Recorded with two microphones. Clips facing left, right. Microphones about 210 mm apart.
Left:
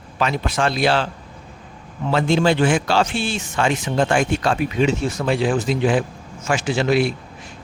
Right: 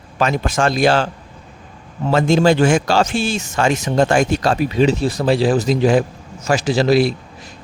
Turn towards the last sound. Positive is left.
turn(degrees=-35)  # may be behind; listen again after turning